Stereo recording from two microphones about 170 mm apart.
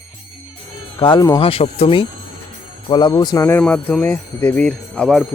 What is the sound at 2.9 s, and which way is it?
Speech, 25° left (ahead or behind).